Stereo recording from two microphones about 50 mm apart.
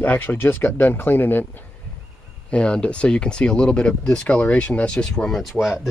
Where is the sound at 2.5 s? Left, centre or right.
Left.